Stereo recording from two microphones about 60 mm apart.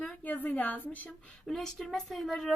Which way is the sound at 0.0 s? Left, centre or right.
Left.